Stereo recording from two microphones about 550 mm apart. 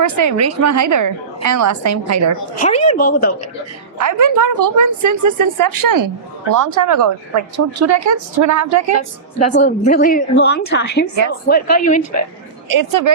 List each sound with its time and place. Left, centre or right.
0.0 s a woman's voice: right
2.6 s a woman's voice: centre
3.9 s speech: right
9.4 s a woman's voice: centre
12.6 s speech: right